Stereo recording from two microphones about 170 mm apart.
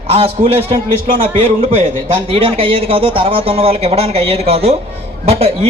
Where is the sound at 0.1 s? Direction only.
35° right (ahead or behind).